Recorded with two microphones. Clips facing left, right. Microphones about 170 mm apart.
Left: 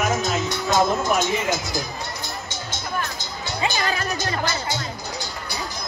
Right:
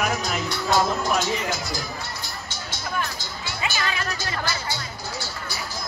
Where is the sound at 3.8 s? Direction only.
40° left (ahead or behind).